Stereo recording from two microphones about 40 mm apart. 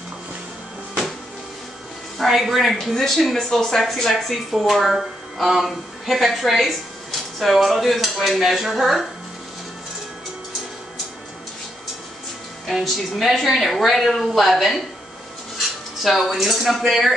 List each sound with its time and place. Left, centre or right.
2.1 s a woman's voice: centre
12.8 s a woman's voice: centre
16.0 s a woman's voice: centre